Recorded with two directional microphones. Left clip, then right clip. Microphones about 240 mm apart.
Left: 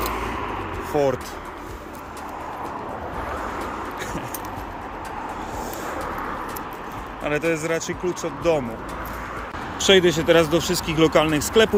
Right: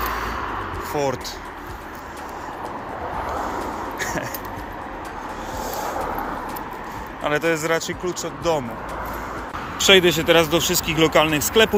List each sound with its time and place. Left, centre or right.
0.0 s a sound: left
0.9 s speech: centre
7.3 s speech: centre
9.7 s speech: centre